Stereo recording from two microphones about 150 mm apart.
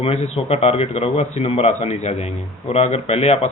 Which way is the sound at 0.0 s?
40° left (ahead or behind).